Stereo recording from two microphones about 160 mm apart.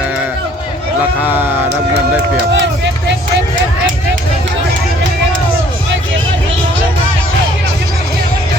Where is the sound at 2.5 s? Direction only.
90° right.